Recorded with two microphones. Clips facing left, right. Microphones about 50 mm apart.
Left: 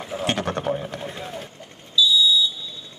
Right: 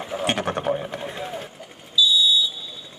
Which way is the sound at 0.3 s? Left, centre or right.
Centre.